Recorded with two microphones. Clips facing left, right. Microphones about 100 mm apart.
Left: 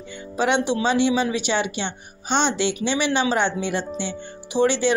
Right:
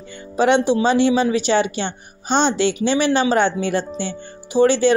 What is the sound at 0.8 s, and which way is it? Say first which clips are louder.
Speech: right 4 dB; 45° right (ahead or behind).